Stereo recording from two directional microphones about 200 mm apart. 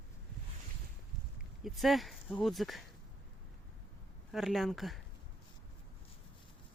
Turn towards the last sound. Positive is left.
turn(degrees=0)  # may be behind; listen again after turning